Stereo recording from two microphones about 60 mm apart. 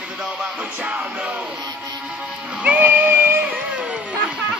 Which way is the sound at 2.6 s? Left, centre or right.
Right.